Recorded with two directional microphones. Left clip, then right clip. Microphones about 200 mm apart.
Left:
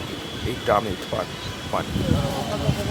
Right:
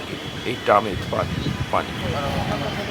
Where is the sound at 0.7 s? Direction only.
15° right (ahead or behind).